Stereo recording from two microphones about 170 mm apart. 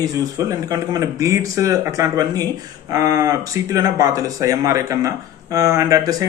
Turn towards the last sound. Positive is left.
turn(degrees=-20)  # may be behind; listen again after turning